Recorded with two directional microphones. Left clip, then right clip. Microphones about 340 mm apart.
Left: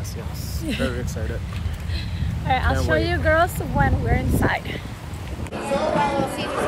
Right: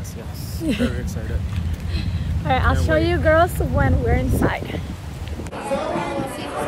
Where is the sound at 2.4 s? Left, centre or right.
Centre.